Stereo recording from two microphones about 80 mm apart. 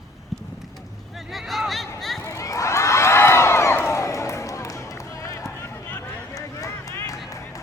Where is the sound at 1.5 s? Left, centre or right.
Centre.